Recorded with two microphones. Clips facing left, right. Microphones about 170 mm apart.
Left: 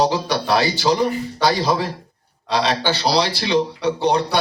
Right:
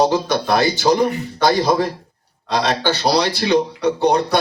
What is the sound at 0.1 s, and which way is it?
A man's voice, 50° right (ahead or behind).